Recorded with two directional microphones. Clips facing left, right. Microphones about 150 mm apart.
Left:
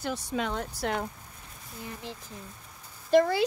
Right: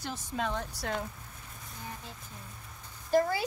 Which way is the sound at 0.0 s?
85° left.